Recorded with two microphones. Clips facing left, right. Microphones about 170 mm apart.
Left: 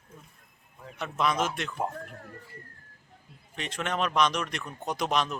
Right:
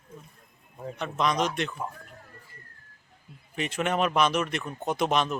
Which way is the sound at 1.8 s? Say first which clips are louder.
Left 4 dB; 60° left (ahead or behind).